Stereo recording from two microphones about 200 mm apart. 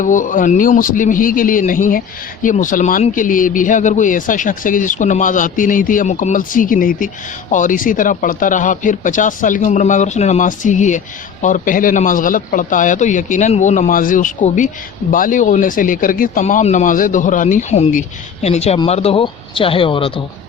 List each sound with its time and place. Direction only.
0.0 s a man's voice: 40° left (ahead or behind)